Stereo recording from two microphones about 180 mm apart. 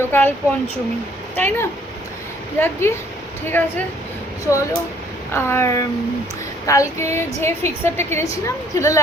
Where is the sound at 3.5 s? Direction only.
10° left (ahead or behind).